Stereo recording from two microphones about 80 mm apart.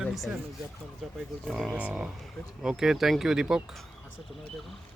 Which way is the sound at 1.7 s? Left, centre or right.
Centre.